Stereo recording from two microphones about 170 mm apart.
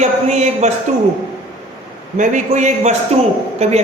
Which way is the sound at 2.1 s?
45° right (ahead or behind).